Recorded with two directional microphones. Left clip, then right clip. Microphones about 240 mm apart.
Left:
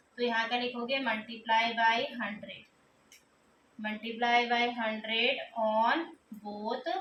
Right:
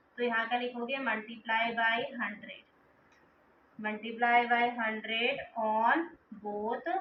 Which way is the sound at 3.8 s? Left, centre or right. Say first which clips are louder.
Right 1 dB; left.